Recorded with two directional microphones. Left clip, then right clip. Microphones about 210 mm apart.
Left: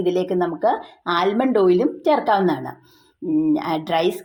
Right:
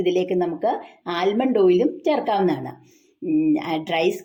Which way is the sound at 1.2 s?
5° left (ahead or behind).